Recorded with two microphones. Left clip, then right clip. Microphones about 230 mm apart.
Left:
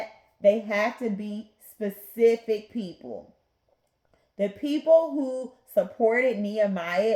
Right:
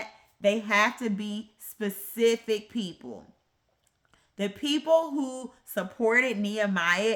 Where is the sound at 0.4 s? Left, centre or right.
Right.